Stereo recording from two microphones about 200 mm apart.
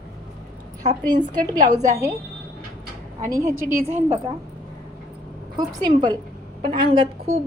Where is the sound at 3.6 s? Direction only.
45° right (ahead or behind).